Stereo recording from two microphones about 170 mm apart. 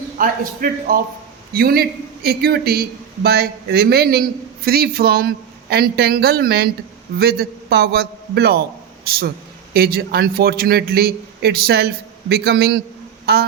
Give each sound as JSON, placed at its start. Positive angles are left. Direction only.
{"t": 0.2, "sound": "a man's voice", "side_deg": -55}